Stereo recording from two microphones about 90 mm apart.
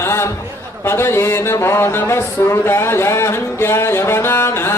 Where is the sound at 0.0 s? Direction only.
30° left (ahead or behind).